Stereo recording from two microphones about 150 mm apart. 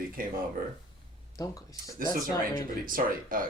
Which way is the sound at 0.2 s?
70° right (ahead or behind).